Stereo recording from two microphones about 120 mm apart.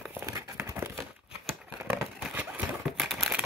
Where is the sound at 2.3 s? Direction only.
10° right (ahead or behind).